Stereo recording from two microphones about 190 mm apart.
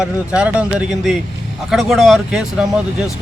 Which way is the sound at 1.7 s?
Centre (ahead or behind).